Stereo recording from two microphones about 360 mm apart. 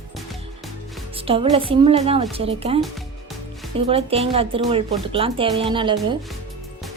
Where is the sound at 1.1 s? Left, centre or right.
Centre.